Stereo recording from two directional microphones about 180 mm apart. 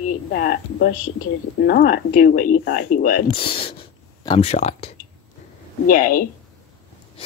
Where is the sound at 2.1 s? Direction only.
50° left (ahead or behind).